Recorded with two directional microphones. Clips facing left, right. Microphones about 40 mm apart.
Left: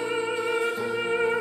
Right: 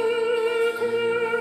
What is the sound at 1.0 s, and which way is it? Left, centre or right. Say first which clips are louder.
Music: right 1 dB; centre.